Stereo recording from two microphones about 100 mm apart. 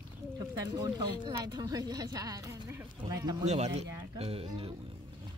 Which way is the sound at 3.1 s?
40° right (ahead or behind).